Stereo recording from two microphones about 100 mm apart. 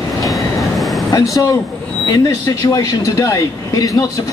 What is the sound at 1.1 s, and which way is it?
Speech, 40° left (ahead or behind).